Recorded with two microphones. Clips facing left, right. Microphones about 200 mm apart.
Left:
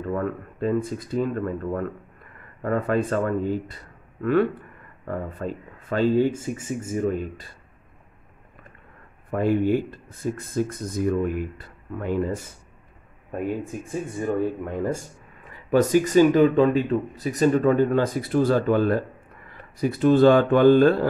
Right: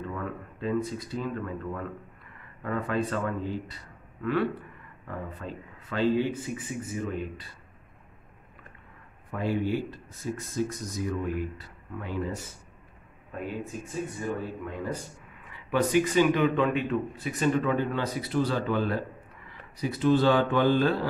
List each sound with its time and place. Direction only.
0.0 s speech: 50° left (ahead or behind)
9.3 s speech: 55° left (ahead or behind)
14.2 s speech: 45° left (ahead or behind)